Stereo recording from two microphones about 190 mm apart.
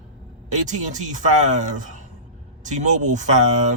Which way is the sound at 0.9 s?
40° right (ahead or behind).